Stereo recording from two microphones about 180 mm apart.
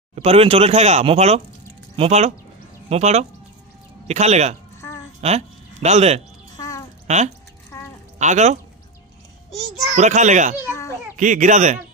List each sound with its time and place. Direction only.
0.1 s speech: 35° right (ahead or behind)
6.5 s music: 20° left (ahead or behind)
7.1 s speech: 40° right (ahead or behind)
7.7 s a sound: 15° left (ahead or behind)
8.2 s speech: 40° right (ahead or behind)
9.9 s speech: 40° right (ahead or behind)